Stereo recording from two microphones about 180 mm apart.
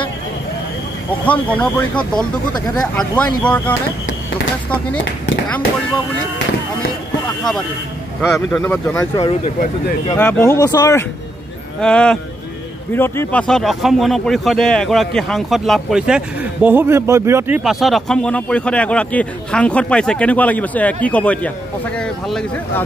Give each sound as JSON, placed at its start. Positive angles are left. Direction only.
{"t": 1.2, "sound": "a man's voice", "side_deg": 10}
{"t": 8.5, "sound": "a man's voice", "side_deg": 10}
{"t": 11.8, "sound": "speech", "side_deg": 5}
{"t": 17.6, "sound": "a man's voice", "side_deg": 0}